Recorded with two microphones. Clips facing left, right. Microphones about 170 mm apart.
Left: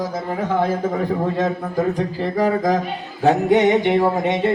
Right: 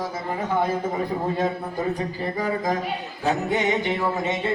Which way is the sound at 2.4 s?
85° left.